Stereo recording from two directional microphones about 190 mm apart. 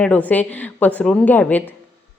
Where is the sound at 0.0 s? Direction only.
10° left (ahead or behind).